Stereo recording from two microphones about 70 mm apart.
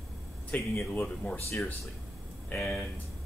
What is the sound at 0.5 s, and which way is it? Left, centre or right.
Speech, left.